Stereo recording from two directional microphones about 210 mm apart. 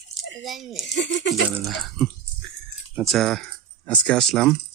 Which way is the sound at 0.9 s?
55° left (ahead or behind).